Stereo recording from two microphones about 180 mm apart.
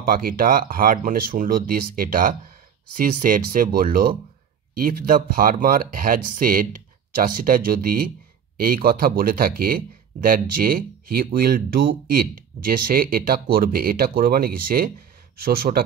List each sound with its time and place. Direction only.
0.0 s speech: 55° right (ahead or behind)